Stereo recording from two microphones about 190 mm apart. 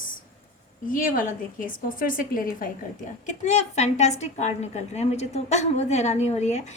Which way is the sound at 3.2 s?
40° left (ahead or behind).